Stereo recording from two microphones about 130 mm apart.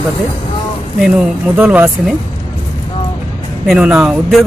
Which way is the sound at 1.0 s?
10° right (ahead or behind).